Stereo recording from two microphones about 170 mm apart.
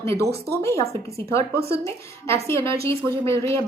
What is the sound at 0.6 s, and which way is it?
A woman's voice, 15° left (ahead or behind).